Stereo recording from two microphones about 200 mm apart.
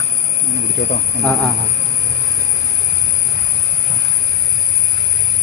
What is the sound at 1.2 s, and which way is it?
Speech, 5° left (ahead or behind).